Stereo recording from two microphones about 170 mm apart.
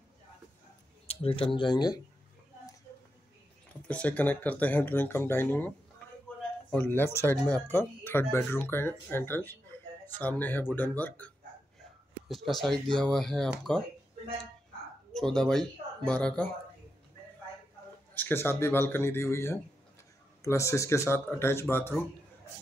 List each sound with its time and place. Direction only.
1.0 s speech: 35° left (ahead or behind)
3.8 s speech: 10° left (ahead or behind)
6.7 s speech: 10° left (ahead or behind)
15.1 s speech: 5° left (ahead or behind)
18.1 s speech: 10° left (ahead or behind)